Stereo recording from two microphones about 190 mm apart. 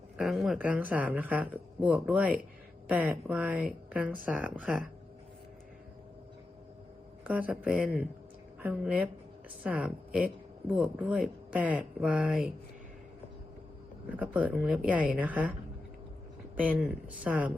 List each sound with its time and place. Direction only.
0.2 s speech: centre (ahead or behind)
7.3 s speech: 10° right (ahead or behind)
14.1 s speech: 10° right (ahead or behind)
16.6 s speech: 10° right (ahead or behind)